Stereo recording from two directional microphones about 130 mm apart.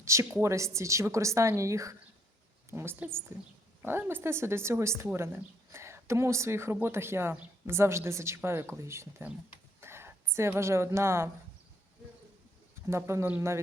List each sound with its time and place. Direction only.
0.0 s a woman's voice: 25° right (ahead or behind)
12.9 s speech: 20° right (ahead or behind)